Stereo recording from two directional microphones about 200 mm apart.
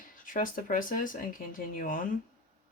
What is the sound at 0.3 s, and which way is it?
Speech, 40° left (ahead or behind).